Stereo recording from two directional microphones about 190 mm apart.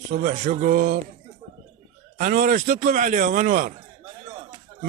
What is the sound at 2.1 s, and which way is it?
A man's voice, 45° right (ahead or behind).